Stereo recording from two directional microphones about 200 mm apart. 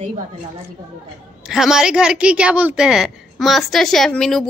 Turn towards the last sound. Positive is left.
turn(degrees=0)  # may be behind; listen again after turning